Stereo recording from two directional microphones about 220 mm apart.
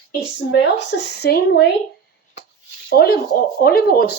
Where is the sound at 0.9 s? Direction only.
50° left (ahead or behind).